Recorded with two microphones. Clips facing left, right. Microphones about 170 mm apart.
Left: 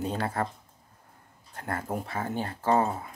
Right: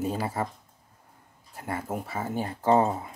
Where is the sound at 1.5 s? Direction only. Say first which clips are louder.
Even; 5° right (ahead or behind).